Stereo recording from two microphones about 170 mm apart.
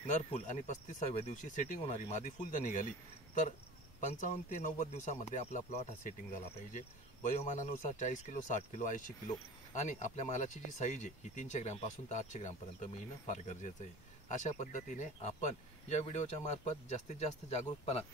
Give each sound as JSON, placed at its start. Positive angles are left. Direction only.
{"t": 0.0, "sound": "speech", "side_deg": 45}
{"t": 4.1, "sound": "speech", "side_deg": 45}